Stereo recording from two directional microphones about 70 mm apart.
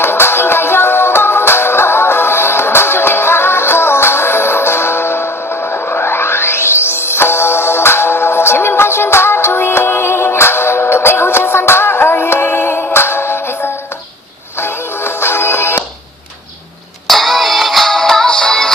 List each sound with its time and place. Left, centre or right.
0.0 s music: left
17.1 s music: centre